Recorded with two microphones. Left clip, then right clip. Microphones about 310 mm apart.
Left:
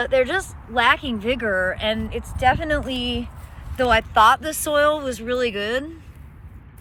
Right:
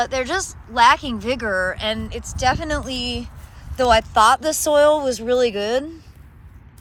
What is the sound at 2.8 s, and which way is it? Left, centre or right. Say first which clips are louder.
Speech: even; right.